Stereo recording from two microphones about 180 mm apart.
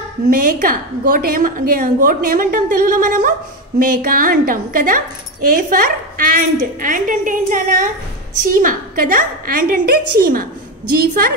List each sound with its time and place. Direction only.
0.3 s a woman's voice: 50° right (ahead or behind)